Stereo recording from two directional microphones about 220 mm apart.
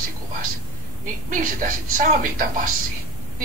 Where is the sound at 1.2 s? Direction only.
40° right (ahead or behind).